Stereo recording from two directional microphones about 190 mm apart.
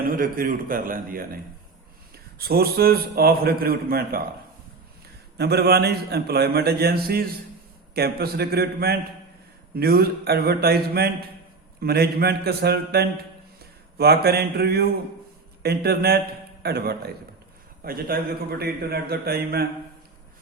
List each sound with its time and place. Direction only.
0.1 s a man's voice: 50° right (ahead or behind)
5.4 s a man's voice: 60° right (ahead or behind)